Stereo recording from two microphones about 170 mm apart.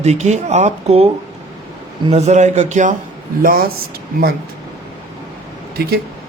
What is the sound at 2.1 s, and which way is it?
Speech, 45° right (ahead or behind).